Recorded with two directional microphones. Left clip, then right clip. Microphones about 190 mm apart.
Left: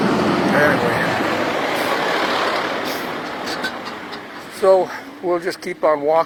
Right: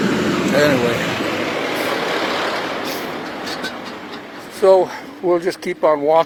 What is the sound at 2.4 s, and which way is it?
Vehicle, 20° left (ahead or behind).